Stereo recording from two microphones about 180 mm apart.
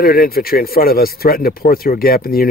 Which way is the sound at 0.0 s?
55° left (ahead or behind).